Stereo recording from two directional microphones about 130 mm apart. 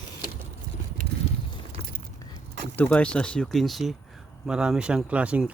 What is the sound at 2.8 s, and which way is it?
Speech, 10° left (ahead or behind).